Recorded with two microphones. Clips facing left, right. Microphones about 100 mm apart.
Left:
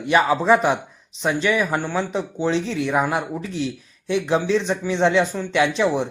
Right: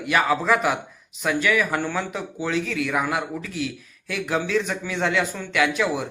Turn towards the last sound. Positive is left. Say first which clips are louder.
# left 3 dB
turn(degrees=25)  # may be behind; listen again after turning